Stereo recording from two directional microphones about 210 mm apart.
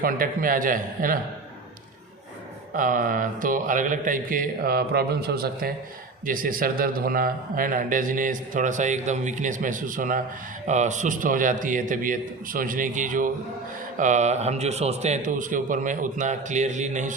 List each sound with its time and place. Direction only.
0.0 s speech: 40° right (ahead or behind)
2.7 s speech: 40° right (ahead or behind)